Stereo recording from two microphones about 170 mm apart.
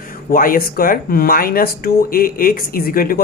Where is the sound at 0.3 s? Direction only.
55° left (ahead or behind).